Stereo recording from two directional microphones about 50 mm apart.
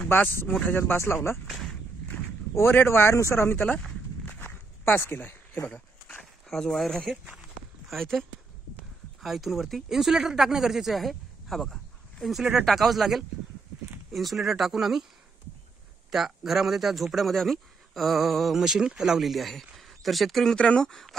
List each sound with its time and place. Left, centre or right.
0.1 s speech: left
1.5 s a sound: centre
2.7 s speech: left
4.4 s a sound: left
6.5 s speech: centre
7.9 s speech: centre
16.1 s speech: centre
20.5 s speech: left
20.9 s speech: centre